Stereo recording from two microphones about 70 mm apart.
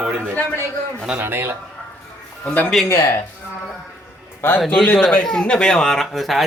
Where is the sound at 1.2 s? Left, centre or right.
Right.